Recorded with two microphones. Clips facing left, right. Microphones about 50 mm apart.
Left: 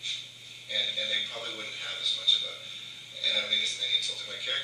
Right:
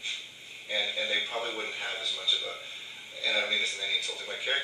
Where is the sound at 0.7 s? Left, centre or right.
Right.